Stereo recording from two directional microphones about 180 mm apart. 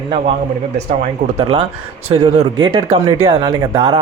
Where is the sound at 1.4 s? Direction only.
30° right (ahead or behind).